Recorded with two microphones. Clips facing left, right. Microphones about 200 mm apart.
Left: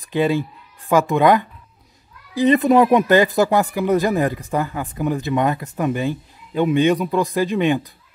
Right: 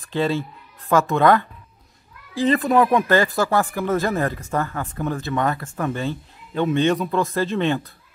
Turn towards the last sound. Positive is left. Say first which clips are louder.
# left 3 dB
turn(degrees=15)  # may be behind; listen again after turning